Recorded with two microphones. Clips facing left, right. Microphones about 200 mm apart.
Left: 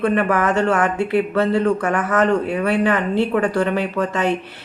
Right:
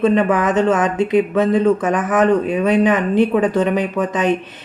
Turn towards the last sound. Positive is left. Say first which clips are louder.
# right 2 dB
turn(degrees=-20)  # may be behind; listen again after turning